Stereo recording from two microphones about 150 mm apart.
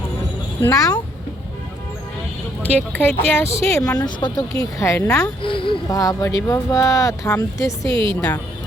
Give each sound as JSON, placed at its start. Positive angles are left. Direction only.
{"t": 0.6, "sound": "speech", "side_deg": 25}
{"t": 2.6, "sound": "speech", "side_deg": 10}
{"t": 5.4, "sound": "speech", "side_deg": 35}
{"t": 5.9, "sound": "speech", "side_deg": 25}
{"t": 7.9, "sound": "a woman's voice", "side_deg": -35}